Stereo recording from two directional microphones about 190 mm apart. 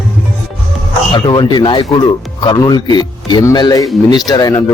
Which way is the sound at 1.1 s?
25° left (ahead or behind).